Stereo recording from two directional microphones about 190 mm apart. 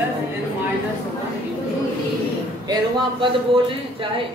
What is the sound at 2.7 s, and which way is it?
Speech, 25° right (ahead or behind).